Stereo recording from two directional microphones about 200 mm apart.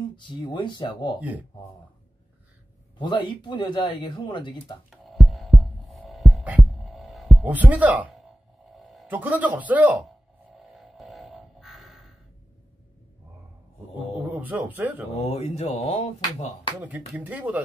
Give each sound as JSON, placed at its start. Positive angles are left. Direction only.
{"t": 0.1, "sound": "speech", "side_deg": 25}
{"t": 3.0, "sound": "speech", "side_deg": 25}
{"t": 5.0, "sound": "heart sounds", "side_deg": 0}
{"t": 5.6, "sound": "music", "side_deg": 0}
{"t": 9.0, "sound": "a man's voice", "side_deg": -10}
{"t": 10.6, "sound": "music", "side_deg": 0}
{"t": 14.1, "sound": "a man's voice", "side_deg": -10}
{"t": 15.1, "sound": "speech", "side_deg": 30}
{"t": 17.1, "sound": "a man's voice", "side_deg": -10}